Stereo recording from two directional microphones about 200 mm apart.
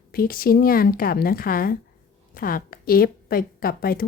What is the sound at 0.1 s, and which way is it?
A woman's voice, 45° left (ahead or behind).